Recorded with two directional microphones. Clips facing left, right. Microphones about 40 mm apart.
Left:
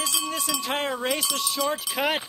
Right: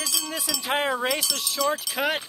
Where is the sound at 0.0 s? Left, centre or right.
Left.